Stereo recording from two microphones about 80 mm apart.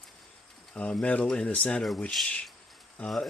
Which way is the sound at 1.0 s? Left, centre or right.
Centre.